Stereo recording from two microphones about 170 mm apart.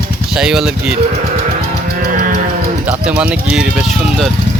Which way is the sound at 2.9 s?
5° right (ahead or behind).